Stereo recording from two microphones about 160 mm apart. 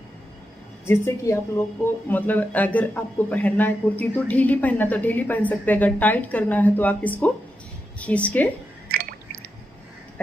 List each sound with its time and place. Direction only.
0.8 s a man's voice: 15° left (ahead or behind)
8.8 s drip: 70° right (ahead or behind)